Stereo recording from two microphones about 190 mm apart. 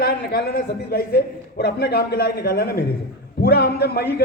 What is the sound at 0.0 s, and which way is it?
A man's voice, 60° left (ahead or behind).